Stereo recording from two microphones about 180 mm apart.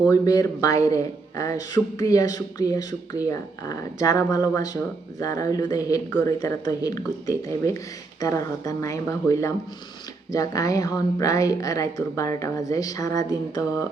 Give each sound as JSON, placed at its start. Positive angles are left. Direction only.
{"t": 0.1, "sound": "speech", "side_deg": 20}